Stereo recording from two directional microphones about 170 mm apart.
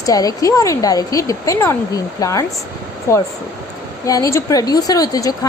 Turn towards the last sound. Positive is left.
turn(degrees=20)  # may be behind; listen again after turning